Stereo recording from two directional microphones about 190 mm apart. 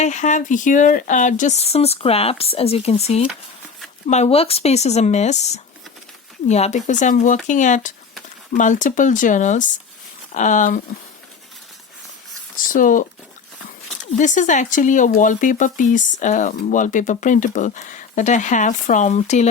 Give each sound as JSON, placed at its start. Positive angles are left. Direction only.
{"t": 0.0, "sound": "speech", "side_deg": 40}
{"t": 6.5, "sound": "speech", "side_deg": 35}
{"t": 12.6, "sound": "speech", "side_deg": 45}
{"t": 14.2, "sound": "speech", "side_deg": 40}